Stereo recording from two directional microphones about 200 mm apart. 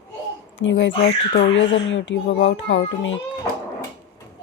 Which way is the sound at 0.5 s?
70° left (ahead or behind).